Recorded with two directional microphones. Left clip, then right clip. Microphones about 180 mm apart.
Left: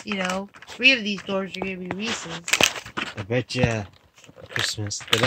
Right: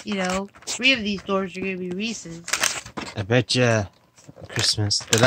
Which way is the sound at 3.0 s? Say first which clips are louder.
Right 6 dB; 10° right (ahead or behind).